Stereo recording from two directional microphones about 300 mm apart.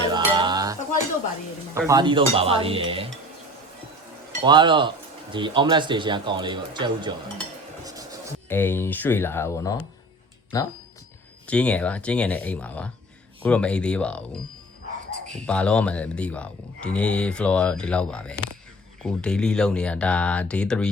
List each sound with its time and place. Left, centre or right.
0.0 s cutlery: centre
1.7 s speech: centre
4.4 s speech: centre
8.4 s speech: centre
15.4 s speech: centre